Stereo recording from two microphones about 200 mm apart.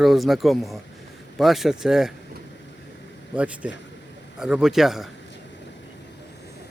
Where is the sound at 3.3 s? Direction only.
5° right (ahead or behind).